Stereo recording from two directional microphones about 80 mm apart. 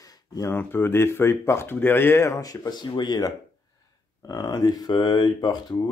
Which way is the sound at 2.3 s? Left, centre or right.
Left.